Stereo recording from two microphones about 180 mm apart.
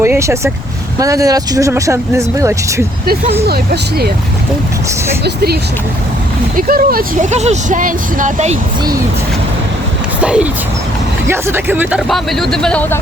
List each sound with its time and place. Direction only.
0.0 s speech: 15° right (ahead or behind)
3.4 s speech: 60° right (ahead or behind)
5.2 s speech: 60° right (ahead or behind)
6.6 s speech: 55° right (ahead or behind)
10.2 s speech: 5° right (ahead or behind)